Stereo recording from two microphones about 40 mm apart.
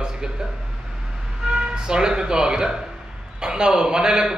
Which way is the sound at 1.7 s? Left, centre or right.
Centre.